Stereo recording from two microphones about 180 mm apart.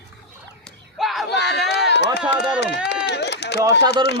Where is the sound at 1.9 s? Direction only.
70° left (ahead or behind).